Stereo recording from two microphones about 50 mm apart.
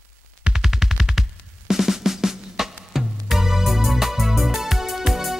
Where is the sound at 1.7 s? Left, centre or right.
Centre.